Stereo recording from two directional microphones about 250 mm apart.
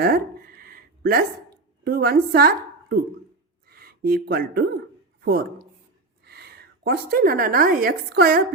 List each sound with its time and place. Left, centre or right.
0.0 s a sound: right
1.8 s a woman's voice: right
3.7 s a woman's voice: right